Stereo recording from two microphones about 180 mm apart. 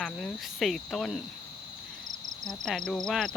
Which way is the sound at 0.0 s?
Centre (ahead or behind).